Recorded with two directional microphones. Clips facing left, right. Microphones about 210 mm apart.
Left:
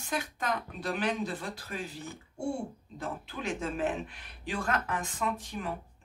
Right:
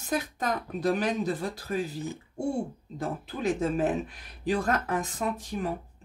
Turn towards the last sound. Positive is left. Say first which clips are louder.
# right 4 dB
turn(degrees=-40)  # may be behind; listen again after turning